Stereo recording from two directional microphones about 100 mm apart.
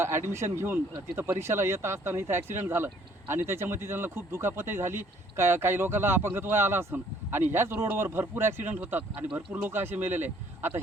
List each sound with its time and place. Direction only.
0.0 s speech: 25° right (ahead or behind)